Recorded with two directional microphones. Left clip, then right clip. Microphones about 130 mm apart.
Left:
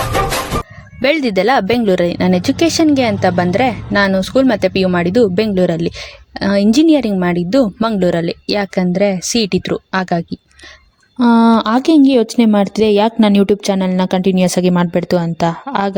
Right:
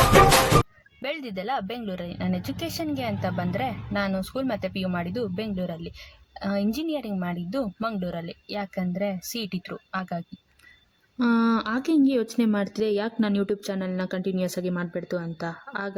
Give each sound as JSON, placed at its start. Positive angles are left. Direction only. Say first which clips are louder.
{"t": 1.0, "sound": "speech", "louder": "left 18 dB", "side_deg": 50}